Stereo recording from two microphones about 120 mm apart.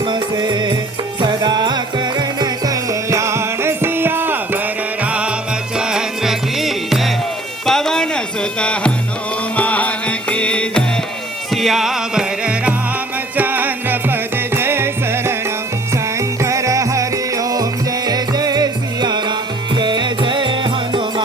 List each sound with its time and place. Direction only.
0.0 s music: 35° right (ahead or behind); by 15.4 s 20° right (ahead or behind)
16.4 s music: 25° right (ahead or behind)